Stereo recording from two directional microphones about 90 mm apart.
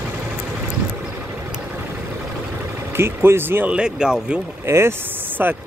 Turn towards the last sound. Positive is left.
turn(degrees=-20)  # may be behind; listen again after turning